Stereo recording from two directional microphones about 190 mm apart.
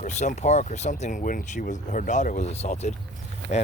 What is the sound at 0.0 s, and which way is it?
Speech, 40° left (ahead or behind).